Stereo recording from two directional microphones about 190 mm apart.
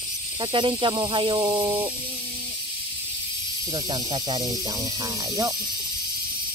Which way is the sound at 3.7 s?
20° right (ahead or behind).